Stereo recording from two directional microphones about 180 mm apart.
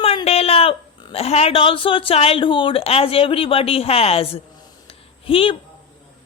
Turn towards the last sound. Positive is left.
turn(degrees=30)  # may be behind; listen again after turning